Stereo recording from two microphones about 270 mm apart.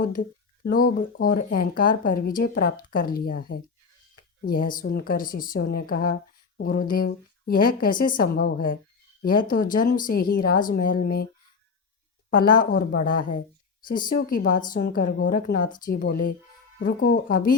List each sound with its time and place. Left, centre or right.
0.0 s speech: left
12.3 s speech: left